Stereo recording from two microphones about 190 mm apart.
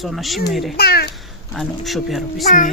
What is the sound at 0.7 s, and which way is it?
Speech, 55° left (ahead or behind).